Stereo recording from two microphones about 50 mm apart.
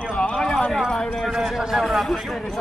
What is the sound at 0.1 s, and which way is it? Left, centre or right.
Clip-clop, left.